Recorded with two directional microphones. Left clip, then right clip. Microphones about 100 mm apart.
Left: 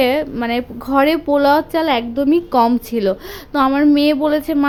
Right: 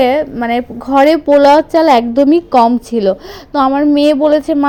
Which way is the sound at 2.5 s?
15° right (ahead or behind).